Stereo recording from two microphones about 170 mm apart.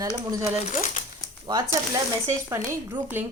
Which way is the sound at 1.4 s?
25° right (ahead or behind).